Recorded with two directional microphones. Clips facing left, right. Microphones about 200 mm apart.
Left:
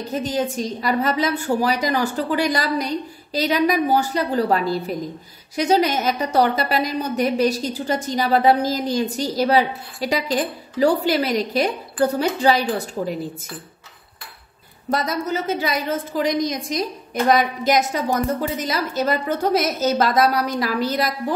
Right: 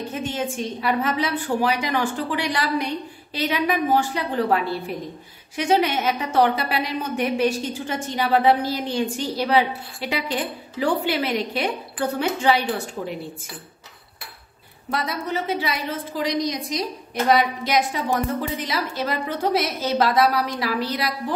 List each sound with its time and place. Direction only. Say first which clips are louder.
0.1 s a woman's voice: left 8 dB; 40° left (ahead or behind)
14.9 s a woman's voice: left 4 dB; 45° left (ahead or behind)